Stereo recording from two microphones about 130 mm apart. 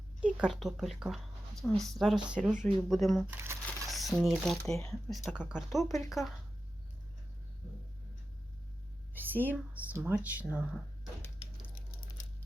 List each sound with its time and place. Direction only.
0.3 s speech: 5° right (ahead or behind)
3.2 s speech: 15° right (ahead or behind)
3.8 s speech: centre (ahead or behind)
5.1 s speech: 10° right (ahead or behind)
9.1 s speech: 15° right (ahead or behind)